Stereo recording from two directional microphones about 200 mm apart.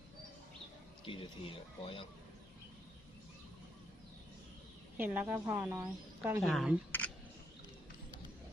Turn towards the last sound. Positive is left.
turn(degrees=10)  # may be behind; listen again after turning